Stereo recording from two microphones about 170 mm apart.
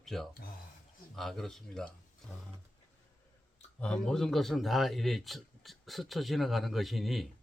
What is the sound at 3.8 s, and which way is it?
A man's voice, 5° left (ahead or behind).